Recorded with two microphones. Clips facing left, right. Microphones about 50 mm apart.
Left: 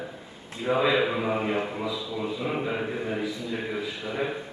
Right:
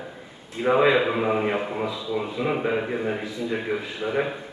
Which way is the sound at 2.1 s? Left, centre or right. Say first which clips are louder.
Right 5 dB; right.